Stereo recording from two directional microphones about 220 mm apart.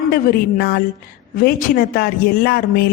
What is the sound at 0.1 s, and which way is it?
A man's voice, 45° left (ahead or behind).